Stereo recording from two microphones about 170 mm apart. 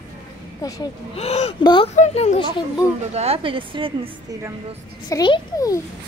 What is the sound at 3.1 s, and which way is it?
A woman's voice, 35° right (ahead or behind).